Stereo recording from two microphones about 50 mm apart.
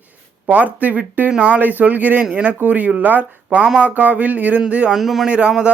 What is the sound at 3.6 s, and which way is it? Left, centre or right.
Speech, centre.